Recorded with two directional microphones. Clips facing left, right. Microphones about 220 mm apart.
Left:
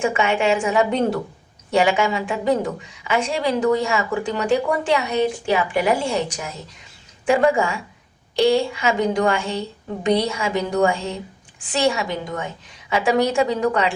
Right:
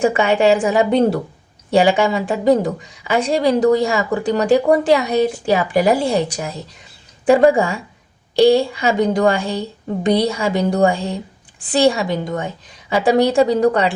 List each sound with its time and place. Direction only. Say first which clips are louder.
0.0 s a woman's voice: right 5 dB; 35° right (ahead or behind)